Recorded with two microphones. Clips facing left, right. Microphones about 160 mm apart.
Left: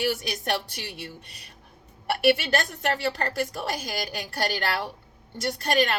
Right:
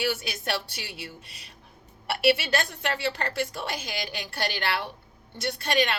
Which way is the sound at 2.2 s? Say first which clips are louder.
Left 1 dB; 40° left (ahead or behind).